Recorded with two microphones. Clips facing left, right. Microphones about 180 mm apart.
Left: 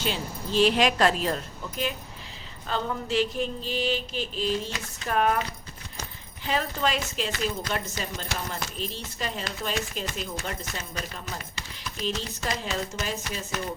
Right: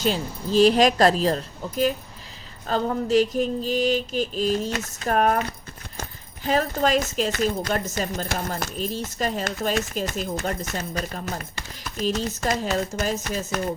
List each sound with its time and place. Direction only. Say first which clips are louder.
0.0 s speech: right 6 dB; 40° right (ahead or behind)